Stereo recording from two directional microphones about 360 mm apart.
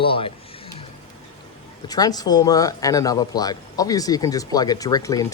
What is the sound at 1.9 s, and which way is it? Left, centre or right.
Speech, centre.